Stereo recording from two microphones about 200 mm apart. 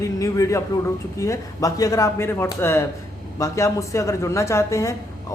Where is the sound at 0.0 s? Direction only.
15° left (ahead or behind).